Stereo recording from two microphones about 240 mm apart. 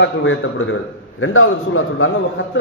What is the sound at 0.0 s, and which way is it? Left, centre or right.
A man's voice, left.